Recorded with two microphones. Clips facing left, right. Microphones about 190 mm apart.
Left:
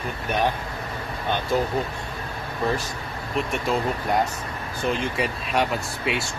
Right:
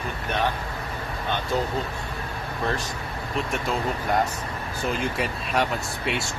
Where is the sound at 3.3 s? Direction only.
Centre (ahead or behind).